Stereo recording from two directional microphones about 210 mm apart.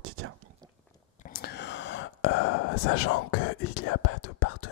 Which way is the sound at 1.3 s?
50° left (ahead or behind).